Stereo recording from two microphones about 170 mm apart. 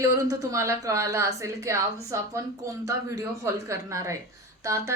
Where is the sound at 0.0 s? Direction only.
15° right (ahead or behind).